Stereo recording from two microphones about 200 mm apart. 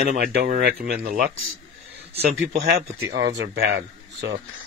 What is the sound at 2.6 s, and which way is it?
Speech, 60° right (ahead or behind).